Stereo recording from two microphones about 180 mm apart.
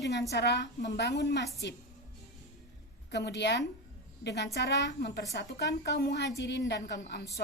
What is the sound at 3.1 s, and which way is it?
A woman's voice, 70° left (ahead or behind).